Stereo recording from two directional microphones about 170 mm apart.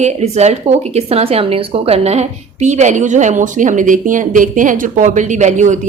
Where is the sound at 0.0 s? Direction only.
40° right (ahead or behind).